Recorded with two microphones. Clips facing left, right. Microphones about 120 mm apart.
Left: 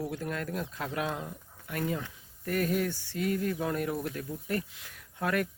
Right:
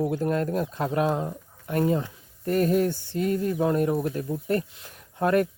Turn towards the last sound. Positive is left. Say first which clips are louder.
# right 8 dB
turn(degrees=-35)  # may be behind; listen again after turning